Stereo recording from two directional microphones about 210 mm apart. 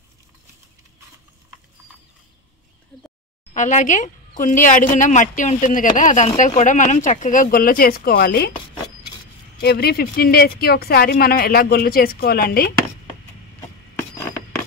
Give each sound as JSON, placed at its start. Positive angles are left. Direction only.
{"t": 3.5, "sound": "speech", "side_deg": 35}
{"t": 9.6, "sound": "speech", "side_deg": 50}